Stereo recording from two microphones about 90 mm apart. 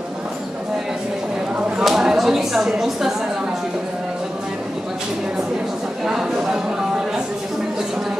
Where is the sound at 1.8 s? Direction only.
5° right (ahead or behind).